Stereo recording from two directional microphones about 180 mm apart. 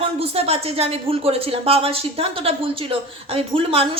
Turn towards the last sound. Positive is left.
turn(degrees=-30)  # may be behind; listen again after turning